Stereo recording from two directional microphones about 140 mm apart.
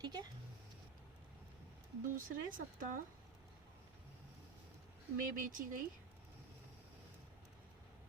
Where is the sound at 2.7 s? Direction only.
75° right (ahead or behind).